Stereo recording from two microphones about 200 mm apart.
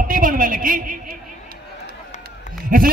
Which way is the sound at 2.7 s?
45° right (ahead or behind).